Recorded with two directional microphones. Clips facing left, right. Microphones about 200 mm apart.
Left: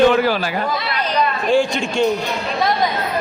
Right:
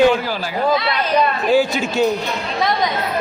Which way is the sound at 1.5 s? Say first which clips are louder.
Even; 5° right (ahead or behind).